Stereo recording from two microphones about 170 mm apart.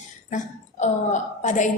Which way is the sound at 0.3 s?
45° left (ahead or behind).